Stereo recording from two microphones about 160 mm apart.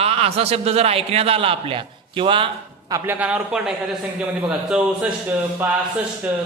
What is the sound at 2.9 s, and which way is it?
A man's voice, 15° right (ahead or behind).